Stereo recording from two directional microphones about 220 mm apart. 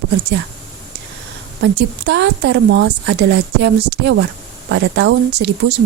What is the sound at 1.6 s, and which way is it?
Speech, 50° right (ahead or behind).